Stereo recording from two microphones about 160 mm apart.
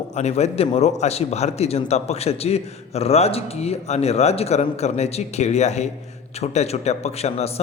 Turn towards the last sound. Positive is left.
turn(degrees=40)  # may be behind; listen again after turning